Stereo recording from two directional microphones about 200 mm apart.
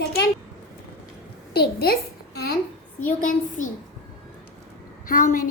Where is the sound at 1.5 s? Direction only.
50° left (ahead or behind).